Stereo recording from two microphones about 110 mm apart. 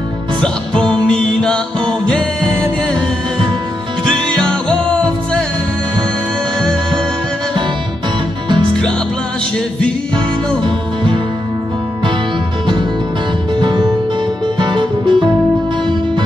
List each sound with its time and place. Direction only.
1.0 s music: 5° left (ahead or behind)
4.4 s music: 5° left (ahead or behind)
10.1 s music: 45° right (ahead or behind)
13.6 s music: 40° right (ahead or behind)